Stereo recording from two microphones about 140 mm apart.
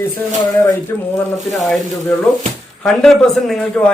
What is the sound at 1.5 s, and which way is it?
Speech, centre (ahead or behind).